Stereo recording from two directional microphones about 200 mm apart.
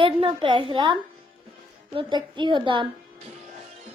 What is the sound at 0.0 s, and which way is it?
Speech, 25° right (ahead or behind).